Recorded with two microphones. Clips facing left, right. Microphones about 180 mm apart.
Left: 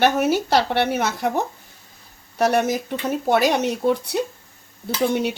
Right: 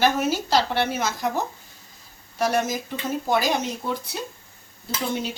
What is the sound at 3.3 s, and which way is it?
Dishes, 70° left (ahead or behind).